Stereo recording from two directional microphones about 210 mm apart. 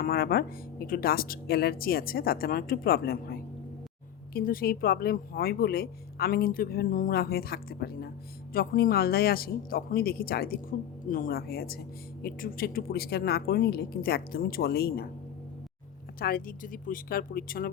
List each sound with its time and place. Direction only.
0.0 s speech: 45° left (ahead or behind)
16.2 s speech: 45° left (ahead or behind)